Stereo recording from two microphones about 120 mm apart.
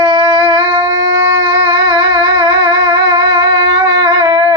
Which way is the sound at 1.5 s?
40° right (ahead or behind).